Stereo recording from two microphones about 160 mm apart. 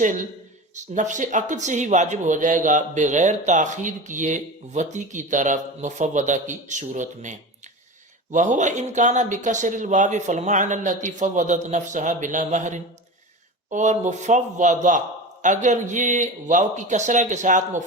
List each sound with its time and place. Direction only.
0.8 s speech: 50° right (ahead or behind)